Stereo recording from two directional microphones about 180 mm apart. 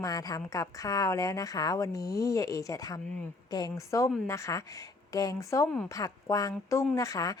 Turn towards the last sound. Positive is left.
turn(degrees=20)  # may be behind; listen again after turning